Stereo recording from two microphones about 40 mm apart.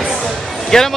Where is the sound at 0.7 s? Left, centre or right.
Centre.